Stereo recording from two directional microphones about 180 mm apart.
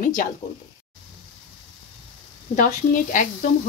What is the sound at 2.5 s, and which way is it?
Speech, 45° left (ahead or behind).